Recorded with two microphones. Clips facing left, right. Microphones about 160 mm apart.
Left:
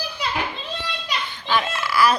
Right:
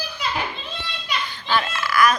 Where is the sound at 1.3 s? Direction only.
20° left (ahead or behind).